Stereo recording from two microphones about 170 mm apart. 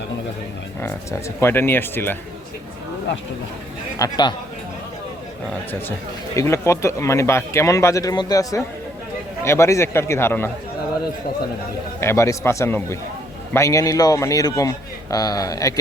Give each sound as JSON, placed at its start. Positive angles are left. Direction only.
{"t": 1.4, "sound": "a man's voice", "side_deg": 15}
{"t": 3.9, "sound": "speech", "side_deg": 20}
{"t": 6.3, "sound": "a man's voice", "side_deg": 15}
{"t": 11.9, "sound": "a man's voice", "side_deg": 15}